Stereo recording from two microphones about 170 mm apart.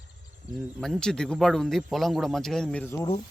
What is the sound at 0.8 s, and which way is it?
A man's voice, 5° left (ahead or behind).